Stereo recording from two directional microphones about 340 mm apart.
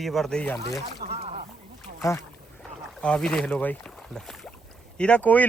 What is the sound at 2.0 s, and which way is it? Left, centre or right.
Speech, centre.